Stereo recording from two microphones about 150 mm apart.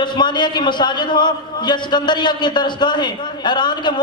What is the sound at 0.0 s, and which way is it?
A man's voice, 30° left (ahead or behind).